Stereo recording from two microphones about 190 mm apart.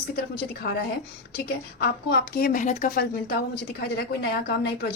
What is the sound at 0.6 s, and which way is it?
A woman's voice, 55° left (ahead or behind).